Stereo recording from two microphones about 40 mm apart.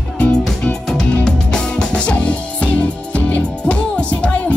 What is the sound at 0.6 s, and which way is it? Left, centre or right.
Music, centre.